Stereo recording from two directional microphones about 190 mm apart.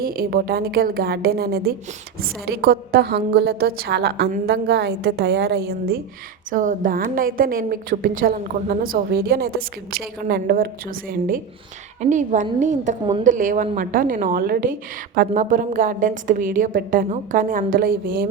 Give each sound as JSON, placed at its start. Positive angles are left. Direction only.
{"t": 0.0, "sound": "a woman's voice", "side_deg": -50}
{"t": 6.5, "sound": "a woman's voice", "side_deg": -45}
{"t": 11.9, "sound": "a woman's voice", "side_deg": -40}